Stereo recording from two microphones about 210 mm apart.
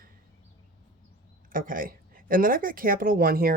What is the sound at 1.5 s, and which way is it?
Speech, 40° right (ahead or behind).